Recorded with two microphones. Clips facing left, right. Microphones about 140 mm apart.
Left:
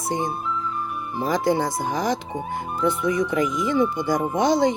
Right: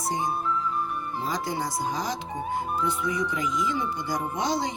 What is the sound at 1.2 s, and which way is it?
Speech, 65° left (ahead or behind).